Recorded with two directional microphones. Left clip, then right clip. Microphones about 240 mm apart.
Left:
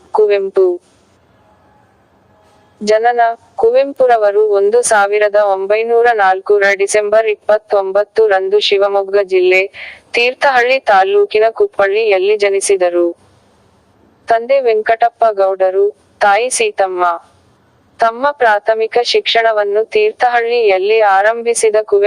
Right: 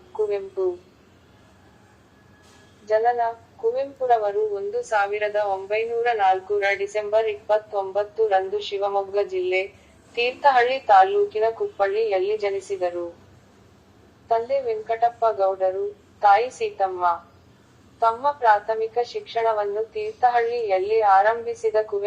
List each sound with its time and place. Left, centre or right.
3.0 s a woman's voice: left
14.3 s a woman's voice: left
18.2 s a woman's voice: left